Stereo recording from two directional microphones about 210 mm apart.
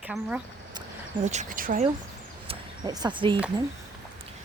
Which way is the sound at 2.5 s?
20° right (ahead or behind).